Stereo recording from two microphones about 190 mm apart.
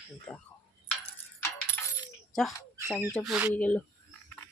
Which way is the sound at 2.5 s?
20° left (ahead or behind).